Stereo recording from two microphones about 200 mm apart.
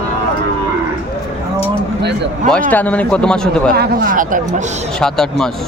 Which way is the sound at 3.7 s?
50° right (ahead or behind).